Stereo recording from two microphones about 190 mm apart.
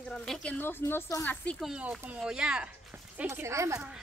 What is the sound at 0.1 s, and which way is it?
A woman's voice, 5° left (ahead or behind).